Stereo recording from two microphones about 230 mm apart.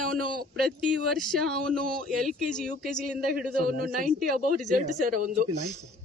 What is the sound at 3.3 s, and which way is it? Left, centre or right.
Speech, right.